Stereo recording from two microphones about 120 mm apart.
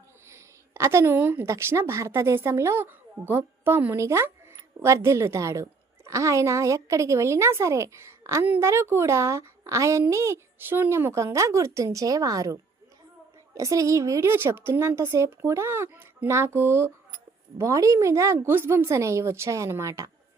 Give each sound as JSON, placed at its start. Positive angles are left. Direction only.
{"t": 0.3, "sound": "a woman's voice", "side_deg": -25}